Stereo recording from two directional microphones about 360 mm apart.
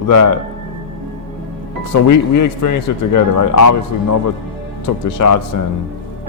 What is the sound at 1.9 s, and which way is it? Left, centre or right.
A man's voice, left.